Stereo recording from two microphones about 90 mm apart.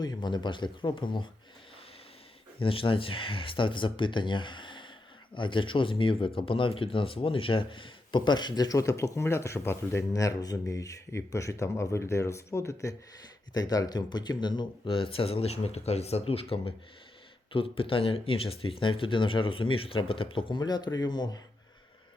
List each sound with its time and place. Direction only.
0.0 s speech: 50° left (ahead or behind); by 1.3 s 65° left (ahead or behind)
2.6 s speech: 80° left; by 10.1 s 30° left (ahead or behind)
10.1 s speech: 40° left (ahead or behind)
13.5 s speech: 45° left (ahead or behind); by 20.6 s 75° left (ahead or behind)
20.6 s speech: 50° left (ahead or behind)